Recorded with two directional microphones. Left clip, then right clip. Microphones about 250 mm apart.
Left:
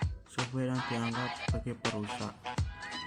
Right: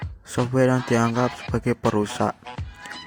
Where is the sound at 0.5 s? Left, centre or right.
Right.